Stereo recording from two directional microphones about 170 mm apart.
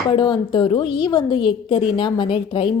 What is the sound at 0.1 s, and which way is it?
A woman's voice, 25° left (ahead or behind).